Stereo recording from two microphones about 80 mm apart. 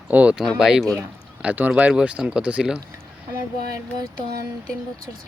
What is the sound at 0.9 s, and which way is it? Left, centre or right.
Speech, centre.